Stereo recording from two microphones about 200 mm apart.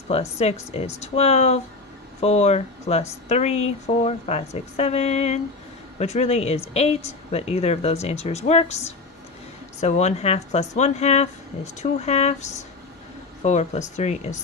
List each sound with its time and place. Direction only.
0.1 s speech: 30° left (ahead or behind)